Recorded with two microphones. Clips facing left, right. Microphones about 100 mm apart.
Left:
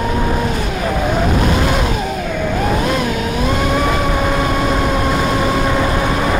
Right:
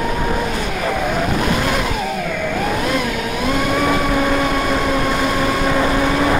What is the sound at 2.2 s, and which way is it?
Vehicle, 25° left (ahead or behind).